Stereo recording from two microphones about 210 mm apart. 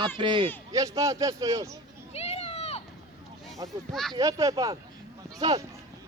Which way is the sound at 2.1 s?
30° left (ahead or behind).